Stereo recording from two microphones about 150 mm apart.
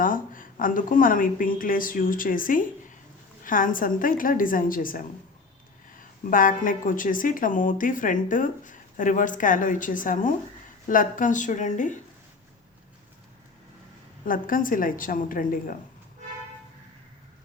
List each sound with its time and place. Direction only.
0.0 s a woman's voice: 65° left (ahead or behind)
14.3 s a woman's voice: 65° left (ahead or behind)